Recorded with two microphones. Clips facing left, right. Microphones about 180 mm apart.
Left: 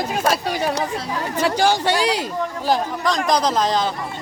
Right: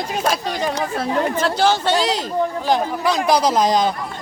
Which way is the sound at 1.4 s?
15° left (ahead or behind).